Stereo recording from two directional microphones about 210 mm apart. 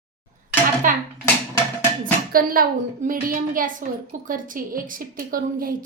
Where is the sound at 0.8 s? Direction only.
40° right (ahead or behind).